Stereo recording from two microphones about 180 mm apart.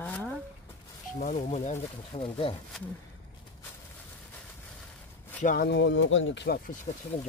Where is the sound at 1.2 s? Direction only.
40° left (ahead or behind).